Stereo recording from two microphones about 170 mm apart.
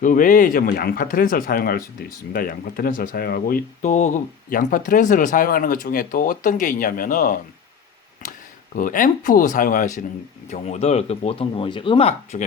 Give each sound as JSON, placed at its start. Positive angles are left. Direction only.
{"t": 0.0, "sound": "speech", "side_deg": 50}
{"t": 8.7, "sound": "speech", "side_deg": 50}